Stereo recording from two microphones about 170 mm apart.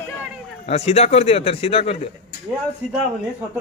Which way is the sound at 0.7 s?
40° left (ahead or behind).